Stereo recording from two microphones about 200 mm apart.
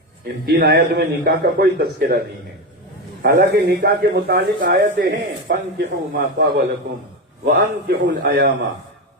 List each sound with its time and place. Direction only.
0.4 s a man's voice: 50° right (ahead or behind)